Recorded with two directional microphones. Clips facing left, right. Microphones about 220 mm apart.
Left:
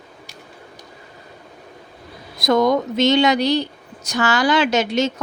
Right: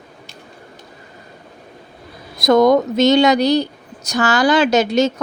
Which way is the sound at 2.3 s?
45° right (ahead or behind).